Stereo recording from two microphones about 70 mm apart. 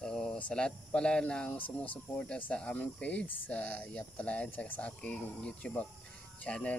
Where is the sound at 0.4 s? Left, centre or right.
Centre.